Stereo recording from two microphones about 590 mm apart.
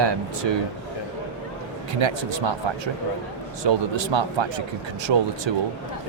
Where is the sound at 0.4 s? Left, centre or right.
Right.